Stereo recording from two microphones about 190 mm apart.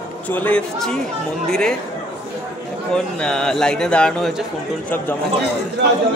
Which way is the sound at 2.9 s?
5° left (ahead or behind).